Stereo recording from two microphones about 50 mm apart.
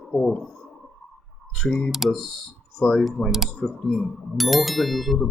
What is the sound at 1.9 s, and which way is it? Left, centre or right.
Speech, centre.